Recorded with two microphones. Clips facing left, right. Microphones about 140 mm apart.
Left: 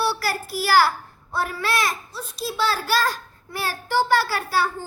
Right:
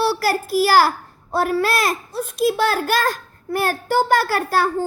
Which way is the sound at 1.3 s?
40° right (ahead or behind).